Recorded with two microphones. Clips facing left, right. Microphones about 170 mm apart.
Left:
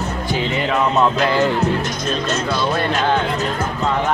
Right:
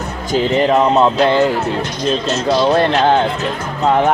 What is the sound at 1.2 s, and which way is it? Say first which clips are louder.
Speech: right 4 dB; 25° right (ahead or behind).